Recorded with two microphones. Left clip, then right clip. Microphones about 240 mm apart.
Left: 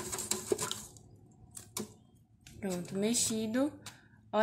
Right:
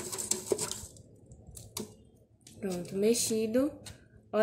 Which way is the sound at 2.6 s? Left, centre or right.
Centre.